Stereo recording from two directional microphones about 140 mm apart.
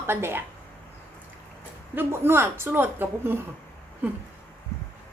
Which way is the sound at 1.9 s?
15° right (ahead or behind).